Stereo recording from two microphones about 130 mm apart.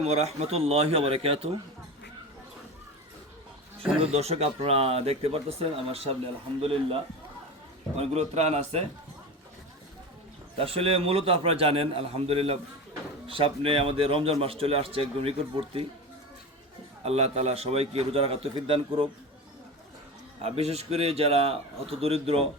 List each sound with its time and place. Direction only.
0.0 s a man's voice: 55° right (ahead or behind)
4.0 s a man's voice: 55° right (ahead or behind)
10.6 s a man's voice: 45° right (ahead or behind)
17.0 s a man's voice: 50° right (ahead or behind)
20.4 s a man's voice: 55° right (ahead or behind)